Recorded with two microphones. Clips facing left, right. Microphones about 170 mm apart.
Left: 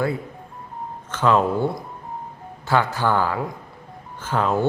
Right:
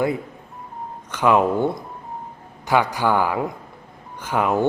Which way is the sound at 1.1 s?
15° right (ahead or behind).